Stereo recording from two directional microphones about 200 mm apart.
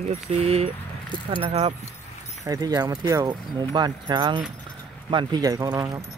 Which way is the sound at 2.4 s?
20° right (ahead or behind).